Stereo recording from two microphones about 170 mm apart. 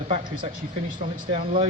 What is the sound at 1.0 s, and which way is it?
Speech, 50° right (ahead or behind).